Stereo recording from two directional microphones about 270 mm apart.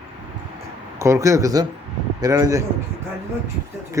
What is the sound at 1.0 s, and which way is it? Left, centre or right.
A man's voice, centre.